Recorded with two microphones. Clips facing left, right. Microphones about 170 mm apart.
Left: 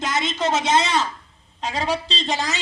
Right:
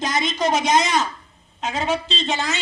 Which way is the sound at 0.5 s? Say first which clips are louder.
Even; 25° left (ahead or behind).